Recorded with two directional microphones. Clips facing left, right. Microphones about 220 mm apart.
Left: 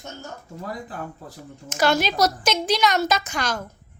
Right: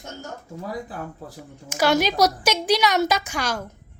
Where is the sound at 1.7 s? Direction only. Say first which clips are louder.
Right 1 dB; 10° right (ahead or behind).